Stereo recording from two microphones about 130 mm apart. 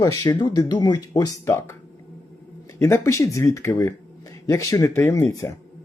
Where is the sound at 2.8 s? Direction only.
20° left (ahead or behind).